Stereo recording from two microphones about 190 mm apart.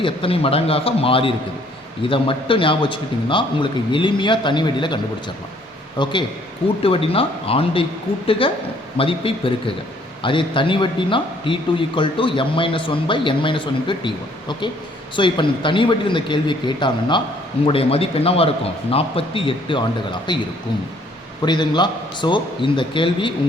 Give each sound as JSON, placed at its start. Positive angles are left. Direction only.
{"t": 0.0, "sound": "speech", "side_deg": 30}
{"t": 6.0, "sound": "a man's voice", "side_deg": 25}